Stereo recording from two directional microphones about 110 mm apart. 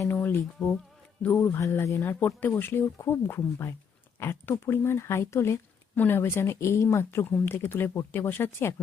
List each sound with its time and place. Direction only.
0.0 s speech: 20° left (ahead or behind)